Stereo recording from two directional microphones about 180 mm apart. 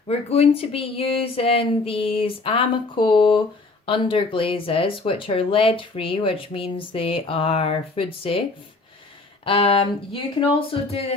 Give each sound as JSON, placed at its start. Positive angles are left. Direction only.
{"t": 0.1, "sound": "speech", "side_deg": 35}
{"t": 9.4, "sound": "speech", "side_deg": 30}